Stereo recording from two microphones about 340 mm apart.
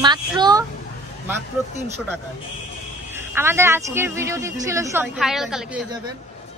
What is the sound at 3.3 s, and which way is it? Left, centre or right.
Speech, centre.